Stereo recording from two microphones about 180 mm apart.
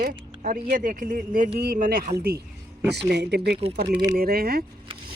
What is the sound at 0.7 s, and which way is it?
Speech, 50° right (ahead or behind).